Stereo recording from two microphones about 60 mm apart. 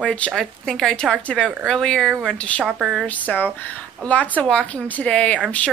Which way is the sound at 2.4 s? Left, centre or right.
Left.